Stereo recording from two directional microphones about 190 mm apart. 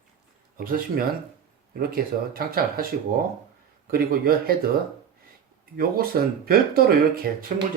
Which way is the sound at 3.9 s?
50° right (ahead or behind).